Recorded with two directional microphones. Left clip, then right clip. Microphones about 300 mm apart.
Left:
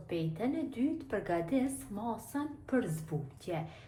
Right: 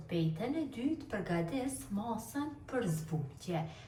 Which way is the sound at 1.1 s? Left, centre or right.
Left.